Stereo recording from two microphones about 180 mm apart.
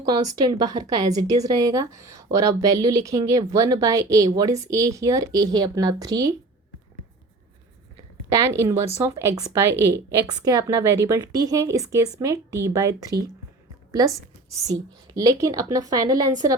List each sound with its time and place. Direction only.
0.0 s a woman's voice: 20° right (ahead or behind)
8.3 s a woman's voice: 15° right (ahead or behind)